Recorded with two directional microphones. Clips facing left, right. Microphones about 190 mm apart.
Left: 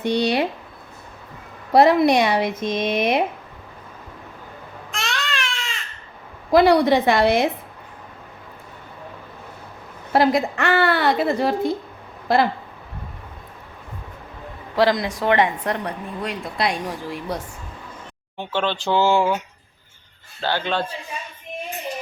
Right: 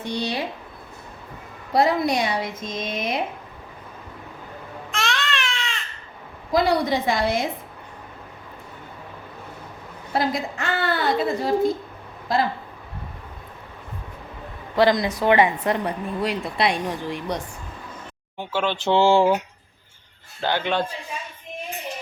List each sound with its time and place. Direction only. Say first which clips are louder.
0.0 s a woman's voice: left 7 dB; 70° left (ahead or behind)
1.7 s a woman's voice: left 6 dB; 65° left (ahead or behind)
4.9 s baby cry: right 2 dB; centre (ahead or behind)
6.5 s a woman's voice: left 6 dB; 65° left (ahead or behind)
10.1 s a woman's voice: left 6 dB; 65° left (ahead or behind)
14.8 s speech: even; centre (ahead or behind)
18.3 s speech: left 1 dB; 10° right (ahead or behind); by 19.4 s 30° right (ahead or behind)
20.4 s a man's voice: even; 15° right (ahead or behind)